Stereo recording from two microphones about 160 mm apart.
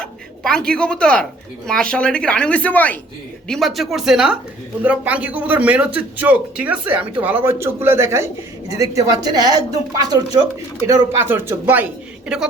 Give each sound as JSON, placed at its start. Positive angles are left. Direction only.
{"t": 0.0, "sound": "a woman's voice", "side_deg": 5}